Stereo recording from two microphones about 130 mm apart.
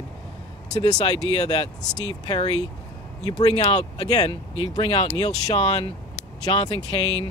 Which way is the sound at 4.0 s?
30° left (ahead or behind).